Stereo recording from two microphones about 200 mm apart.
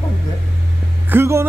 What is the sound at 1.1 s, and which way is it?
Speech, 10° right (ahead or behind).